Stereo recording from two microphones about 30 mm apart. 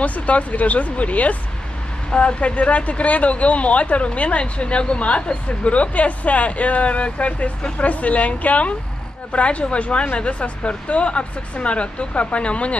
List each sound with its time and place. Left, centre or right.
0.0 s speech: left